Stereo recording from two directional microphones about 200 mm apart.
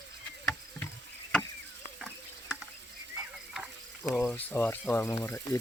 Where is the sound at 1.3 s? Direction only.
5° left (ahead or behind).